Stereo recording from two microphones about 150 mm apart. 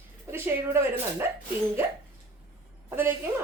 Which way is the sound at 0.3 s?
15° right (ahead or behind).